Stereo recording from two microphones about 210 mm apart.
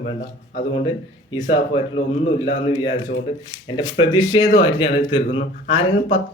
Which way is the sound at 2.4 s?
25° left (ahead or behind).